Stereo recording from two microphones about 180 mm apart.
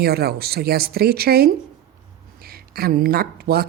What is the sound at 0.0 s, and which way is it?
Speech, 60° right (ahead or behind).